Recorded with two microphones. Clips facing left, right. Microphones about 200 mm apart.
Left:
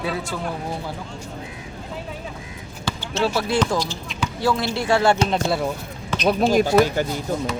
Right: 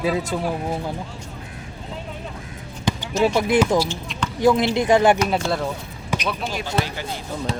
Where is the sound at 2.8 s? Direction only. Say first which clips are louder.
Right 3 dB; 15° right (ahead or behind).